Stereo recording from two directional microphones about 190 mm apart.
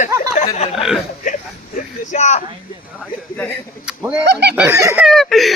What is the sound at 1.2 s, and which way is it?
Speech, 40° left (ahead or behind).